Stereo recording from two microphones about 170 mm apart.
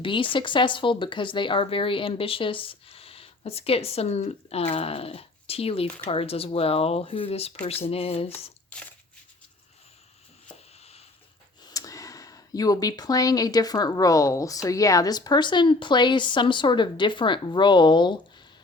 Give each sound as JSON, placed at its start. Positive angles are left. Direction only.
{"t": 0.0, "sound": "speech", "side_deg": 30}
{"t": 8.7, "sound": "a sound", "side_deg": 10}
{"t": 11.6, "sound": "speech", "side_deg": 20}